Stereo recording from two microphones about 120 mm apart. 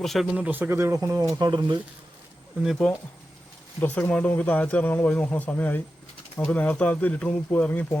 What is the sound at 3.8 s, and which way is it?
Speech, 15° left (ahead or behind).